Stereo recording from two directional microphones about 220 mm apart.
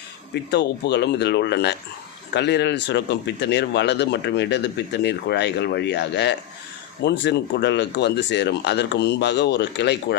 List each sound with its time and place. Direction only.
0.5 s speech: 50° left (ahead or behind)